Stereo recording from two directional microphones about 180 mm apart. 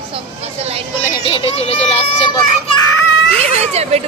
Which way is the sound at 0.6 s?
35° right (ahead or behind).